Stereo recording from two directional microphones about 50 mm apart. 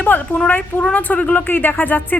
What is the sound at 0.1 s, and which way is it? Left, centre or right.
Speech, left.